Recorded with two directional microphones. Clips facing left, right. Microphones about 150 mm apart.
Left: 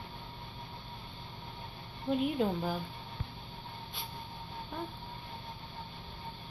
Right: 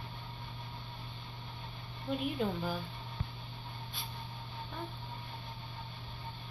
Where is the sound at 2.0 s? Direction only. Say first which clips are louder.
Left 4 dB; 20° left (ahead or behind).